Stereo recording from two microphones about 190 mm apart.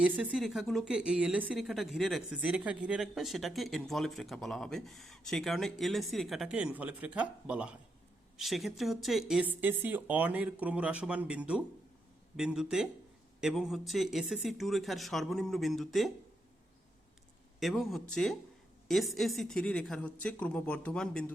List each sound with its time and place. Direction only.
0.0 s speech: 5° right (ahead or behind)
17.6 s speech: centre (ahead or behind)